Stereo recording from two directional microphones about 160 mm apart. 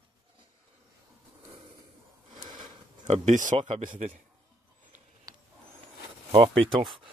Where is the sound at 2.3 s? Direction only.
30° right (ahead or behind).